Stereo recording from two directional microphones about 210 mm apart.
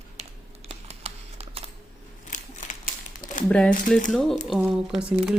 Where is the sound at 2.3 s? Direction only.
35° left (ahead or behind).